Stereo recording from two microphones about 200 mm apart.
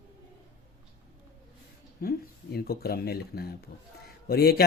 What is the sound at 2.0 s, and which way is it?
Speech, 50° left (ahead or behind).